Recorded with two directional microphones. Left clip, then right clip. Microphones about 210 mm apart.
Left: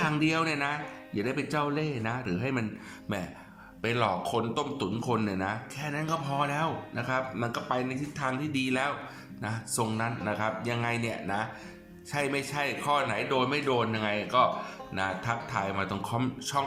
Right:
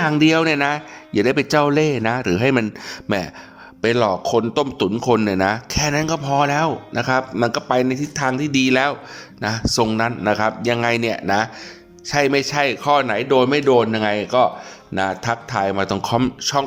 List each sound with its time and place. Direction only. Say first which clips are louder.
0.0 s speech: right 12 dB; 40° right (ahead or behind)
3.8 s a man's voice: right 11 dB; 35° right (ahead or behind)